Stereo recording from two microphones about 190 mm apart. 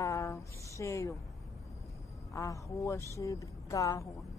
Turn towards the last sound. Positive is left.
turn(degrees=15)  # may be behind; listen again after turning